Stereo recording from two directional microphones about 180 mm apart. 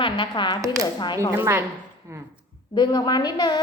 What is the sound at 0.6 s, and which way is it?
Speech, 20° right (ahead or behind).